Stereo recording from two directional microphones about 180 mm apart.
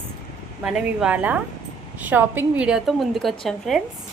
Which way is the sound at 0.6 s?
5° right (ahead or behind).